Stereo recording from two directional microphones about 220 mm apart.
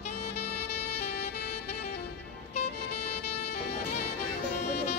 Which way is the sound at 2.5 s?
90° left.